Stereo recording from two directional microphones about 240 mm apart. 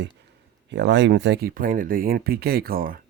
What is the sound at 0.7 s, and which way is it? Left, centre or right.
Speech, right.